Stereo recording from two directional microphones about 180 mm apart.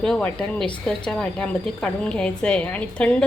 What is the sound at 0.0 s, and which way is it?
A woman's voice, 5° left (ahead or behind).